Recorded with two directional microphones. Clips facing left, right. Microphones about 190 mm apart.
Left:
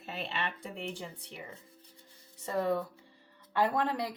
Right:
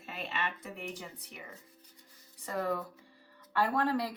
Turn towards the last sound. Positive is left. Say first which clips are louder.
# even
turn(degrees=20)  # may be behind; listen again after turning